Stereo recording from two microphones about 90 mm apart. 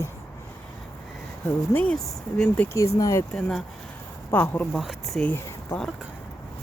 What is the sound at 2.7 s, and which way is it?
Speech, 35° left (ahead or behind).